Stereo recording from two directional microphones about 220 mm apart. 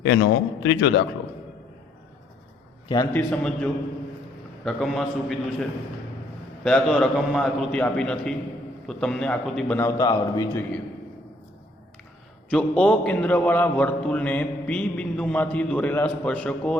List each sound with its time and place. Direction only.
0.6 s speech: 55° left (ahead or behind)
2.9 s a man's voice: 15° left (ahead or behind)
3.2 s a man's voice: 5° left (ahead or behind)
6.7 s a man's voice: centre (ahead or behind)
12.5 s a man's voice: 5° left (ahead or behind)